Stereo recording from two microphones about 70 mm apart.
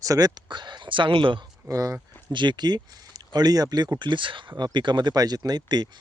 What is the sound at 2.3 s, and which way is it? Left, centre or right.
Speech, right.